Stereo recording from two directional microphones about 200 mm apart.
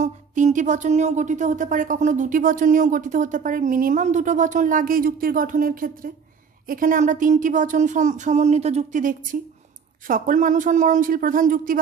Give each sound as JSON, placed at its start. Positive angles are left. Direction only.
{"t": 0.0, "sound": "speech", "side_deg": -40}